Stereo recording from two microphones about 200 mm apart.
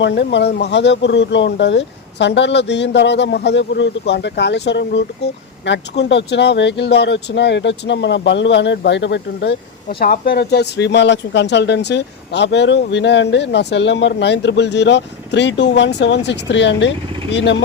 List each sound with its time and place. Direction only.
0.0 s speech: 60° left (ahead or behind)
10.0 s speech: 50° left (ahead or behind)